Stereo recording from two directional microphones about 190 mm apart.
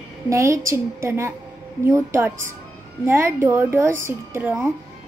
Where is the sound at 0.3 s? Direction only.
15° right (ahead or behind).